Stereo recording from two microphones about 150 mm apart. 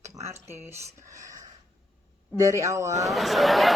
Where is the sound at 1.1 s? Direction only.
20° right (ahead or behind).